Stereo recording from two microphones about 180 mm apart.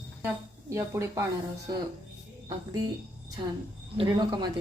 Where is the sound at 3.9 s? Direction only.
25° right (ahead or behind).